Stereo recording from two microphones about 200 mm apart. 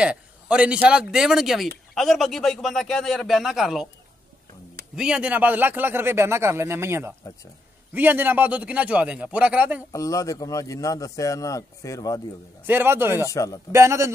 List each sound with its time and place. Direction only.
0.0 s a man's voice: 5° right (ahead or behind)
4.9 s a man's voice: 5° right (ahead or behind)
9.9 s speech: 15° left (ahead or behind)
12.6 s a man's voice: 10° right (ahead or behind)
13.3 s speech: 15° left (ahead or behind)
13.7 s a man's voice: 15° right (ahead or behind)